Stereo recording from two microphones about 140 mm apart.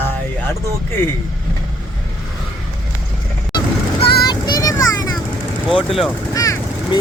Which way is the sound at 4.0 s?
35° left (ahead or behind).